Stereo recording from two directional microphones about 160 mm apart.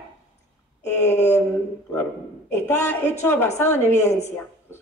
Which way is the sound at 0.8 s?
15° left (ahead or behind).